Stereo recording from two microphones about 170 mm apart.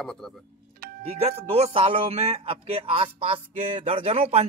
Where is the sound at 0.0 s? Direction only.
5° left (ahead or behind).